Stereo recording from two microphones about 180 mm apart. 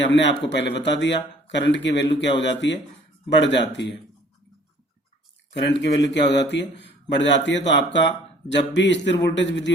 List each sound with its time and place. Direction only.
0.0 s speech: 80° left
5.7 s speech: 75° left (ahead or behind)